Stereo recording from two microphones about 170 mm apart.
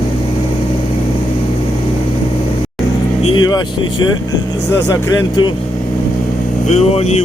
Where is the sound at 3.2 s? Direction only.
25° left (ahead or behind).